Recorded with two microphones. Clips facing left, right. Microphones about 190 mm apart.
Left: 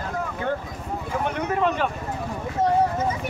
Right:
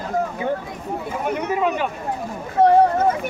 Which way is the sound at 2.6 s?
60° right (ahead or behind).